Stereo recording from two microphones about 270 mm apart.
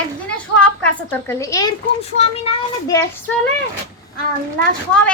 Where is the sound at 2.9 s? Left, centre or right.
Centre.